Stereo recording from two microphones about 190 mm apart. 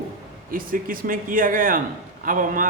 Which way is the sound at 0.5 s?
50° right (ahead or behind).